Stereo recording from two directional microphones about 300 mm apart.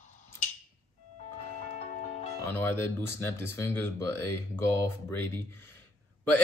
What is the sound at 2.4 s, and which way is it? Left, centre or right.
Speech, centre.